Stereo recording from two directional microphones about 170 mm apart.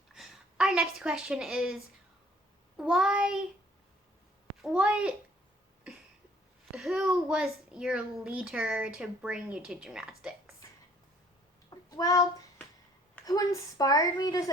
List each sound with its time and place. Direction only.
0.1 s a woman's voice: 5° right (ahead or behind)
4.6 s a woman's voice: 5° right (ahead or behind)
6.7 s a child's voice: 5° right (ahead or behind)
11.7 s child singing: 20° left (ahead or behind)
13.2 s speech: 20° left (ahead or behind)